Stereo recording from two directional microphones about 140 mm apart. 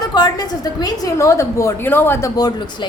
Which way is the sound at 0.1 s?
30° left (ahead or behind).